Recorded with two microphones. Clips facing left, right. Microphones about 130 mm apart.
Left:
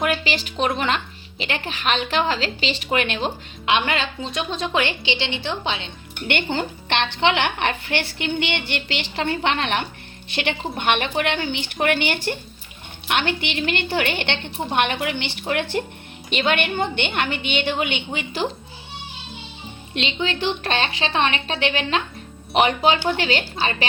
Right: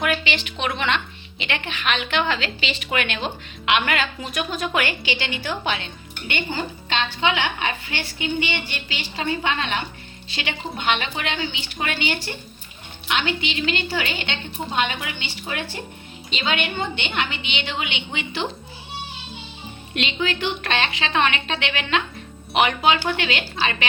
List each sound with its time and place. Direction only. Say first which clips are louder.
0.1 s a woman's voice: left 1 dB; 35° left (ahead or behind)
6.2 s a woman's voice: left 4 dB; 65° left (ahead or behind); by 18.4 s 40° left (ahead or behind)
19.9 s a woman's voice: even; 25° left (ahead or behind)
23.0 s a woman's voice: left 3 dB; 35° left (ahead or behind)